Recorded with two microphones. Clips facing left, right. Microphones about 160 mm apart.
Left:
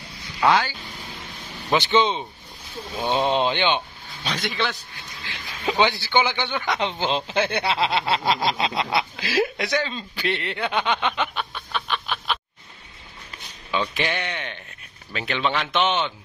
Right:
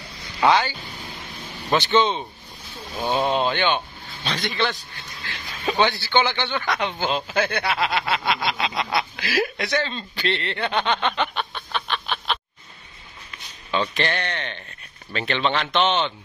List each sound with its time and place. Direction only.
0.4 s a man's voice: centre (ahead or behind)
1.7 s speech: 15° left (ahead or behind)
3.3 s speech: 20° left (ahead or behind)
4.3 s a man's voice: centre (ahead or behind)
5.2 s speech: 15° left (ahead or behind)
7.6 s a sound: 25° left (ahead or behind)
9.8 s speech: 10° left (ahead or behind)
13.7 s speech: 10° left (ahead or behind)